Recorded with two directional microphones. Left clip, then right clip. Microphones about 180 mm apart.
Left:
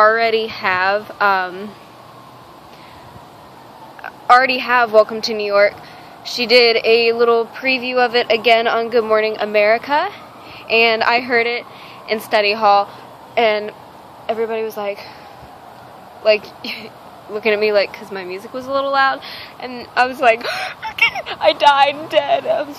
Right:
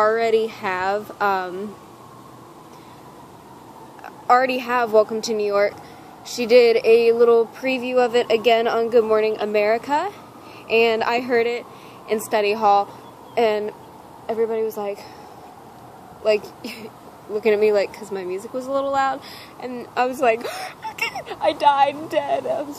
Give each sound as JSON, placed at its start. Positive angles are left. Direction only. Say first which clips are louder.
{"t": 0.0, "sound": "speech", "louder": "left 5 dB", "side_deg": -5}
{"t": 4.0, "sound": "a woman's voice", "louder": "left 5 dB", "side_deg": -5}
{"t": 14.2, "sound": "speech", "louder": "left 2 dB", "side_deg": 5}
{"t": 16.3, "sound": "speech", "louder": "left 5 dB", "side_deg": -5}